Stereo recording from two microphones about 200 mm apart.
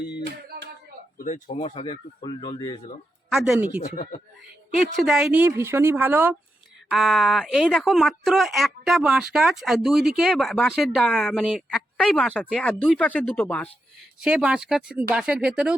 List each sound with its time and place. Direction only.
1.2 s speech: 40° left (ahead or behind); by 2.8 s 20° left (ahead or behind)
3.3 s speech: 5° right (ahead or behind)
3.9 s speech: 45° left (ahead or behind)
4.9 s a woman's voice: centre (ahead or behind)
6.9 s speech: centre (ahead or behind)
14.2 s speech: 5° right (ahead or behind)